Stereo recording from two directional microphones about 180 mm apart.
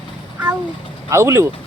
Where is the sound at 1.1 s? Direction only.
15° right (ahead or behind).